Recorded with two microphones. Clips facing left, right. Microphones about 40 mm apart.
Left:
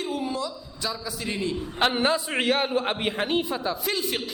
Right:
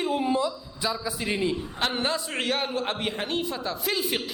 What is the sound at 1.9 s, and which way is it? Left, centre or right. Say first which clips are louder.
A man's voice: left 4 dB; centre.